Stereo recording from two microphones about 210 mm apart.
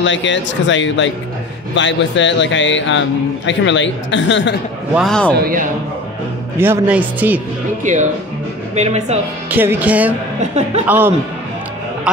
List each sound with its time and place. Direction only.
0.0 s speech: 60° left (ahead or behind)
4.9 s a man's voice: centre (ahead or behind)
5.4 s a woman's voice: 40° right (ahead or behind)
6.6 s speech: 10° right (ahead or behind)
7.8 s a woman's voice: 35° right (ahead or behind)
9.5 s speech: 10° right (ahead or behind)